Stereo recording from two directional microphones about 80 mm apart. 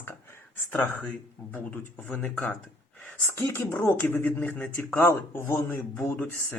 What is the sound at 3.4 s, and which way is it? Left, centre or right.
Speech, left.